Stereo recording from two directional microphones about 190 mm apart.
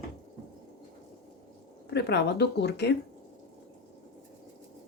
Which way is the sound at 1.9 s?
60° left (ahead or behind).